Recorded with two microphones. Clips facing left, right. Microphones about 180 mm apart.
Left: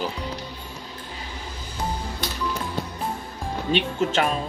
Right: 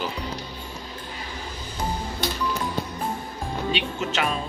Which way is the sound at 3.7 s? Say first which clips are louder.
Left 8 dB; 50° left (ahead or behind).